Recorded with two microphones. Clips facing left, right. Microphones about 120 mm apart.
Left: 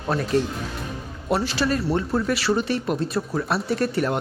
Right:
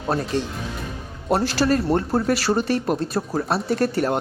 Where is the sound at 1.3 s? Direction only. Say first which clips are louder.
Right 3 dB; 45° right (ahead or behind).